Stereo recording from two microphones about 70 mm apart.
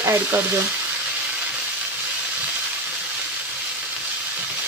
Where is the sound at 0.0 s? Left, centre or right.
Right.